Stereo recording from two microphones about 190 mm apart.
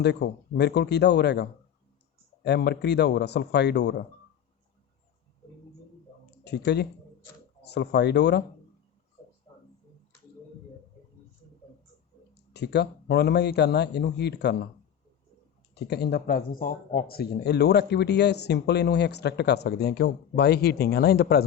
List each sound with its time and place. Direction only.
0.0 s speech: 60° left (ahead or behind)
6.4 s speech: 60° left (ahead or behind)
9.5 s a sound: 25° left (ahead or behind)
12.3 s speech: 60° left (ahead or behind)
15.7 s speech: 60° left (ahead or behind)